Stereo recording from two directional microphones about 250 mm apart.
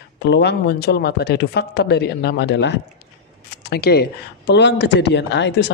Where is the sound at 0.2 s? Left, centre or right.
Left.